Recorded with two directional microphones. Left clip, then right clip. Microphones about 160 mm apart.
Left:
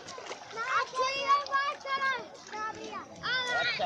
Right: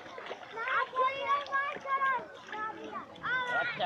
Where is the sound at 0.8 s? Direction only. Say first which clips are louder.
Even; 65° left (ahead or behind).